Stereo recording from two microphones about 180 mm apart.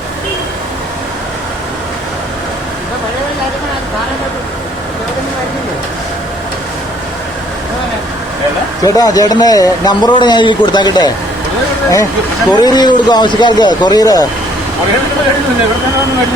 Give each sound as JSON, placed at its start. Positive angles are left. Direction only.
{"t": 8.8, "sound": "speech", "side_deg": 20}
{"t": 12.5, "sound": "speech", "side_deg": 25}